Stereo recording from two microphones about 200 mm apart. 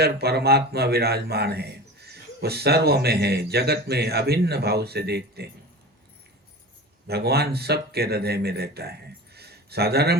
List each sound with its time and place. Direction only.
0.0 s a man's voice: 55° right (ahead or behind)
7.1 s speech: 55° right (ahead or behind)